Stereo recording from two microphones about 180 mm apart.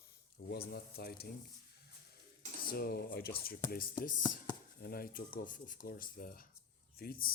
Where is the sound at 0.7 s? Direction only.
60° left (ahead or behind).